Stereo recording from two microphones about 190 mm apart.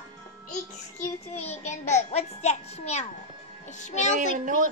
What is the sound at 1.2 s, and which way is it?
A child's voice, 35° left (ahead or behind).